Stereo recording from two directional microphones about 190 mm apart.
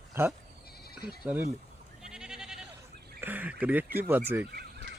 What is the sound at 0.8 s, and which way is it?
Sheep, 55° left (ahead or behind).